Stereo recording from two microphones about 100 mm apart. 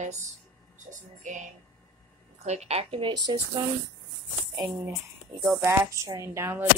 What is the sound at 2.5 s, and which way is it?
Speech, 90° right.